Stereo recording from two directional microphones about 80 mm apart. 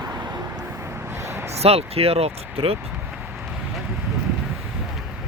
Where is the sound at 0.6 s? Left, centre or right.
Right.